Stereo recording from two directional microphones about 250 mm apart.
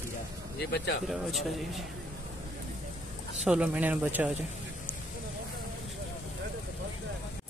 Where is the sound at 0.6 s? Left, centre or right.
Left.